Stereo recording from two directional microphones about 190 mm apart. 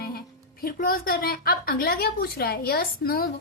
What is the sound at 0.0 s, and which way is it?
A woman's voice, 55° left (ahead or behind).